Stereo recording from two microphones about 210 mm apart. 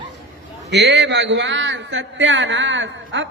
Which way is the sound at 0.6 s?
55° right (ahead or behind).